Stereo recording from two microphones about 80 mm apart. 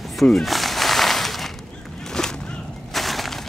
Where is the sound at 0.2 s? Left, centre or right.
Centre.